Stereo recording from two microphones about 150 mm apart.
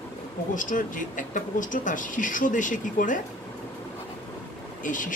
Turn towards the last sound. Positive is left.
turn(degrees=60)  # may be behind; listen again after turning